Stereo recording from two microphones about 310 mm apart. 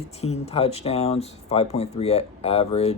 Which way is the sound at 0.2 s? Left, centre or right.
Centre.